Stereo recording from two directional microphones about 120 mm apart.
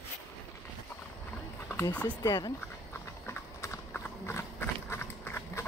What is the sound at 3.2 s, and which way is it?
Clip-clop, 20° left (ahead or behind).